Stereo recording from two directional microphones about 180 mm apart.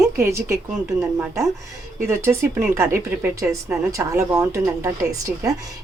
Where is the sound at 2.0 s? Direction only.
15° right (ahead or behind).